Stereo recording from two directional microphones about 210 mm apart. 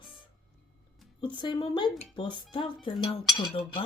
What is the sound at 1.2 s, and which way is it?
A woman's voice, 20° left (ahead or behind).